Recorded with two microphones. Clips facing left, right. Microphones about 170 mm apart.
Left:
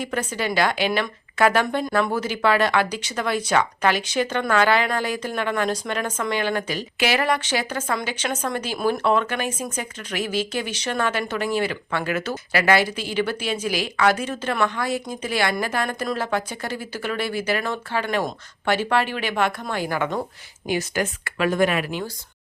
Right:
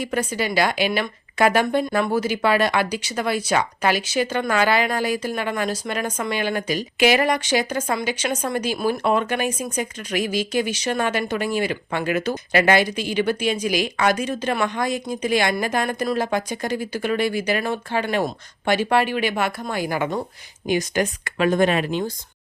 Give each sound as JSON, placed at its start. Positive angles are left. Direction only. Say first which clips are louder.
{"t": 0.0, "sound": "speech", "louder": "right 2 dB", "side_deg": -10}